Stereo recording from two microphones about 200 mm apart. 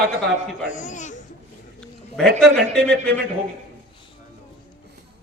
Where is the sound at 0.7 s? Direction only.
40° left (ahead or behind).